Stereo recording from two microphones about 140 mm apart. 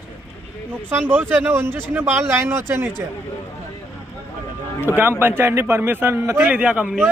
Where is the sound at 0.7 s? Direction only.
15° right (ahead or behind).